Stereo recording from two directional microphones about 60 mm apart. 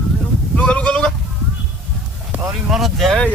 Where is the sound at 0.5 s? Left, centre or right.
Centre.